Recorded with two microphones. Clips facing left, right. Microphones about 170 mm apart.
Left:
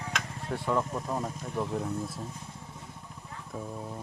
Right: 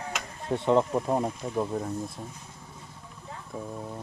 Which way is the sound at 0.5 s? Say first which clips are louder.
Right 7 dB; 25° right (ahead or behind).